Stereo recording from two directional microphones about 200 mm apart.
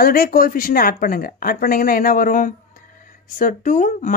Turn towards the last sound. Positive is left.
turn(degrees=40)  # may be behind; listen again after turning